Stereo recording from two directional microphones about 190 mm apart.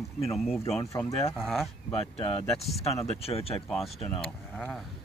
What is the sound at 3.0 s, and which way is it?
Speech, 30° left (ahead or behind).